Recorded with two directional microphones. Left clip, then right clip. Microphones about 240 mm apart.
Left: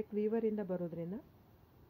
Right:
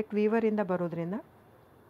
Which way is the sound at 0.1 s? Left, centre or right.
Centre.